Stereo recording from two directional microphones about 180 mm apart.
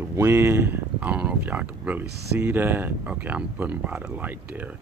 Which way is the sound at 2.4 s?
10° right (ahead or behind).